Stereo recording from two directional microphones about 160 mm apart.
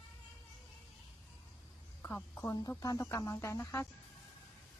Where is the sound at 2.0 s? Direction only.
15° left (ahead or behind).